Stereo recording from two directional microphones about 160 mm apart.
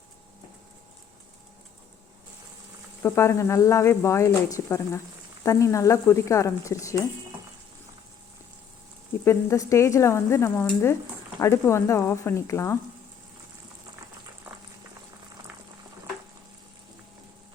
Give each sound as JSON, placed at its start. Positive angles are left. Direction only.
{"t": 3.0, "sound": "speech", "side_deg": 20}
{"t": 9.2, "sound": "speech", "side_deg": 20}